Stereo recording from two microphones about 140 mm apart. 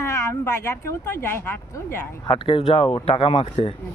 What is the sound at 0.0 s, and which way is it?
Speech, 20° left (ahead or behind).